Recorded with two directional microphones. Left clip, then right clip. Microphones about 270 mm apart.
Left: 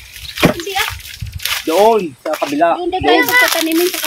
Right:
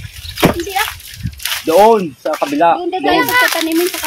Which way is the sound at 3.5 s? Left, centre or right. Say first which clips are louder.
Even; left.